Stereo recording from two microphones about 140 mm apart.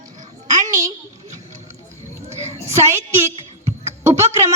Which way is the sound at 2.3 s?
50° right (ahead or behind).